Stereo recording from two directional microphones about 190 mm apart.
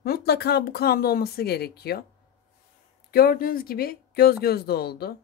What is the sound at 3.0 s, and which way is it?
Speech, 50° left (ahead or behind).